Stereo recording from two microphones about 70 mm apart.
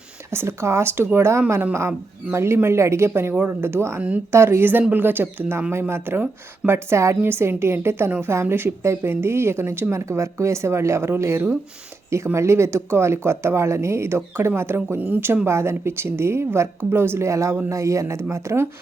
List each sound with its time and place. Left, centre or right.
0.3 s a woman's voice: right
14.8 s speech: right
15.4 s a woman's voice: right